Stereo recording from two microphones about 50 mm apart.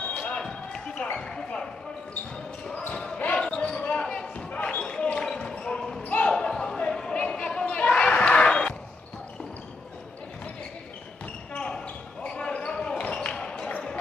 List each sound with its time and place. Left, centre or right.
0.0 s basketball bounce: left
2.9 s basketball bounce: centre
4.5 s basketball bounce: left
6.8 s a sound: centre
12.2 s basketball bounce: left